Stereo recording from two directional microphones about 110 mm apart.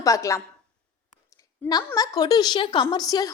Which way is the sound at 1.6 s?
15° left (ahead or behind).